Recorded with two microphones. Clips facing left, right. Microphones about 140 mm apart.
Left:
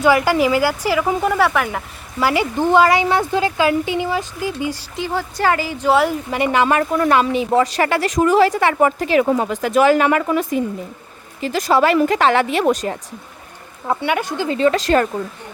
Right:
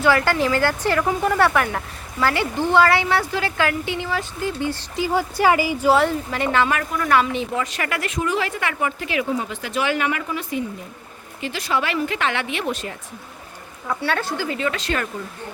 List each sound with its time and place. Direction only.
0.0 s speech: 15° left (ahead or behind)
2.2 s speech: 15° left (ahead or behind)
4.9 s speech: 10° right (ahead or behind)
5.9 s speech: 5° left (ahead or behind)
6.3 s a woman's voice: 15° left (ahead or behind)
7.5 s speech: 35° left (ahead or behind)
9.2 s speech: 65° left (ahead or behind)
9.5 s speech: 45° left (ahead or behind)
13.8 s a woman's voice: 25° left (ahead or behind)